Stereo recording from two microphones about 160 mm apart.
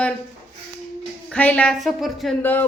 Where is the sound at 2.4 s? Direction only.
10° left (ahead or behind).